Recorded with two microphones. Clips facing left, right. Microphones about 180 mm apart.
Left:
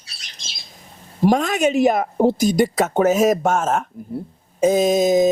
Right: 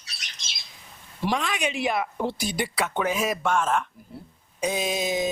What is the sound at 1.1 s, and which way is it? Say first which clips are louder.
A woman's voice: left 10 dB; 45° left (ahead or behind).